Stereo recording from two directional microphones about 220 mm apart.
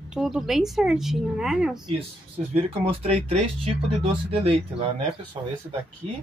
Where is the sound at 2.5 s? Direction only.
25° right (ahead or behind).